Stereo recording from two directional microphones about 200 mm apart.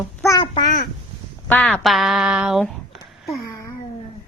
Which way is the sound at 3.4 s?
20° left (ahead or behind).